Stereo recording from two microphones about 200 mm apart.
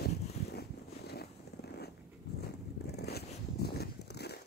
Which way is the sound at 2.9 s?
55° left (ahead or behind).